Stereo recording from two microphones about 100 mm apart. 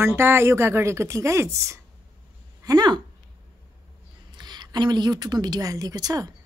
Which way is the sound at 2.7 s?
45° right (ahead or behind).